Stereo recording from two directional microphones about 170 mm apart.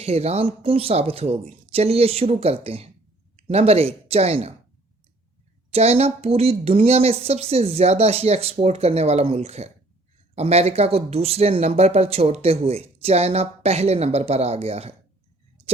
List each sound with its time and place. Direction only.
0.0 s speech: 35° right (ahead or behind)
5.7 s speech: 35° right (ahead or behind)